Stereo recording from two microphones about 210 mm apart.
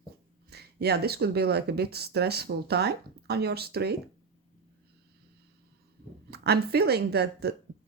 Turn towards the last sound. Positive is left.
turn(degrees=-50)  # may be behind; listen again after turning